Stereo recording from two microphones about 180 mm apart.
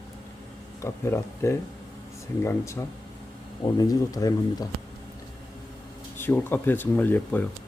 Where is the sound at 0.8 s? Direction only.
15° left (ahead or behind).